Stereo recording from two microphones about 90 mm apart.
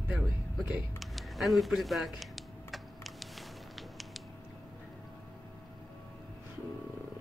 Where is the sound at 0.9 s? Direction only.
Centre (ahead or behind).